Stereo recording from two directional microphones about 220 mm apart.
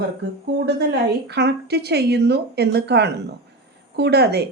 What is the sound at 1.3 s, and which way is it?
A woman's voice, 50° right (ahead or behind).